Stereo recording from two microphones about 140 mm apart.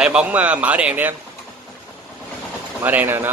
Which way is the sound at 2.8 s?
15° right (ahead or behind).